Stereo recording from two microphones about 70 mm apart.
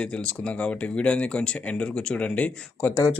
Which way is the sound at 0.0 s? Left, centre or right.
Centre.